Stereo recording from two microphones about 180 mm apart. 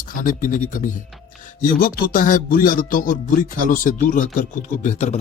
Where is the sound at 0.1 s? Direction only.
50° left (ahead or behind).